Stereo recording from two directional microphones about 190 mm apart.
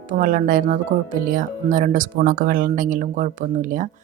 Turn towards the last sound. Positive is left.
turn(degrees=-45)  # may be behind; listen again after turning